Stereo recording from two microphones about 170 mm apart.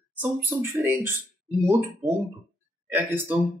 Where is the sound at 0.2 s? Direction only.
10° right (ahead or behind).